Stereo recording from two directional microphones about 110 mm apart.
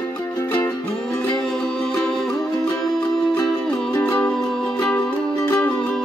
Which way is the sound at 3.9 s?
25° left (ahead or behind).